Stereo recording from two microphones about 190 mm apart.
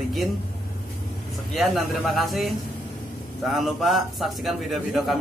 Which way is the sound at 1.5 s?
Centre (ahead or behind).